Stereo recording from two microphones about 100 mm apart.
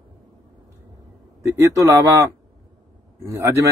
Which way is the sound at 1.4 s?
35° right (ahead or behind).